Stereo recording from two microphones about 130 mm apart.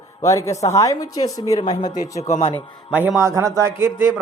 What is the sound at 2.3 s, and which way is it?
Speech, 50° left (ahead or behind).